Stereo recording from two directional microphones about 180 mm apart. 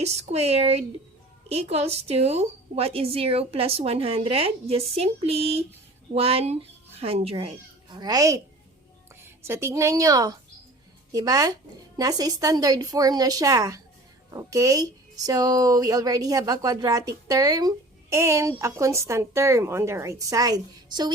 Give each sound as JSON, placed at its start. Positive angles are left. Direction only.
{"t": 0.0, "sound": "a woman's voice", "side_deg": -35}
{"t": 9.4, "sound": "a woman's voice", "side_deg": -15}